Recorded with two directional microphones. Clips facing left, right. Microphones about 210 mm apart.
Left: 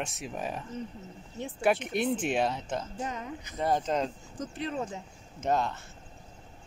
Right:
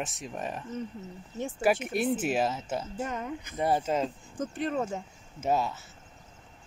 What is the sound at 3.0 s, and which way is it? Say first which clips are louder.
Speech: right 3 dB; 50° right (ahead or behind).